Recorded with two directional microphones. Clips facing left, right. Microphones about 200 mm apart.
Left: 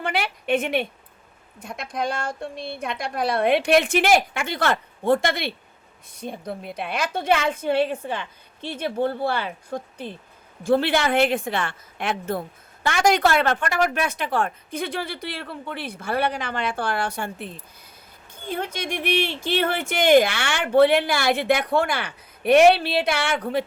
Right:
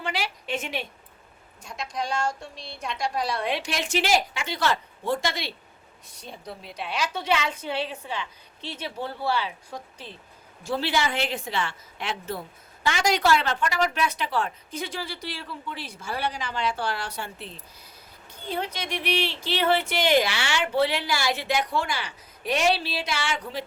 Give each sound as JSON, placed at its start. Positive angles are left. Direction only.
{"t": 0.0, "sound": "a woman's voice", "side_deg": 55}